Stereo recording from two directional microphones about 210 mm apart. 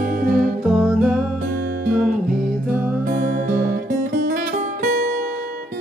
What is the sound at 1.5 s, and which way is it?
Music, 40° right (ahead or behind).